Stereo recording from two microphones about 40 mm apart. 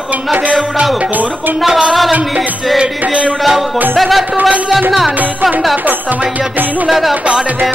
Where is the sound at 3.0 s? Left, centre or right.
Right.